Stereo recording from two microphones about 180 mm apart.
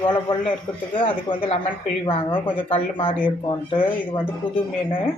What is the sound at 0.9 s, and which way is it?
Speech, 30° left (ahead or behind).